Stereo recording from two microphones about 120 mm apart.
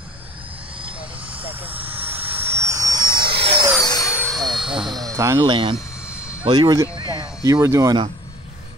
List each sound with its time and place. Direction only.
1.3 s vehicle: 15° right (ahead or behind); by 3.6 s 45° right (ahead or behind)
3.8 s vehicle: 35° left (ahead or behind)
4.3 s aircraft: centre (ahead or behind)
4.7 s a sound: 35° right (ahead or behind)
5.4 s speech: 45° right (ahead or behind)
6.0 s vehicle: 10° right (ahead or behind)
6.4 s speech: 40° right (ahead or behind)
7.0 s a sound: 35° right (ahead or behind)